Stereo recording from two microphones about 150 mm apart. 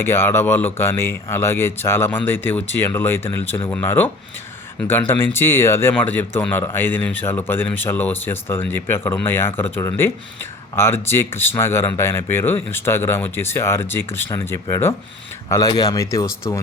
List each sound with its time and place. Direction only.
0.0 s speech: 15° left (ahead or behind)